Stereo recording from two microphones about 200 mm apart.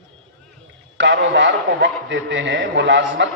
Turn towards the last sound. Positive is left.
turn(degrees=-60)  # may be behind; listen again after turning